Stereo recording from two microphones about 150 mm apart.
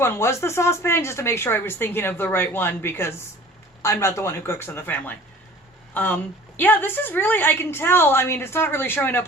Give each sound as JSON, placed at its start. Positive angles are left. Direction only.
{"t": 0.0, "sound": "speech", "side_deg": 15}